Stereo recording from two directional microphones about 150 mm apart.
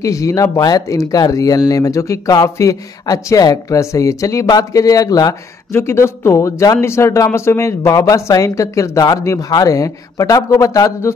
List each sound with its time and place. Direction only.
0.0 s speech: 20° left (ahead or behind)